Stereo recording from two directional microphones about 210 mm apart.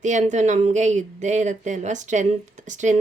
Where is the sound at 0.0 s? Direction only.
35° right (ahead or behind).